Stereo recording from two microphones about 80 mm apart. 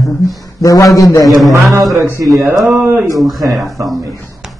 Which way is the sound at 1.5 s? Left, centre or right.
Right.